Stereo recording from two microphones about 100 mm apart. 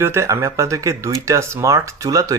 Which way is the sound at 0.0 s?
25° right (ahead or behind).